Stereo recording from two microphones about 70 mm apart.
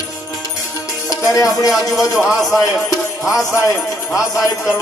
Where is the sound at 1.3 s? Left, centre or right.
Left.